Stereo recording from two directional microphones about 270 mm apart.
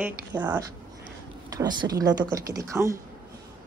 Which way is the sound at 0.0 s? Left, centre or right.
Centre.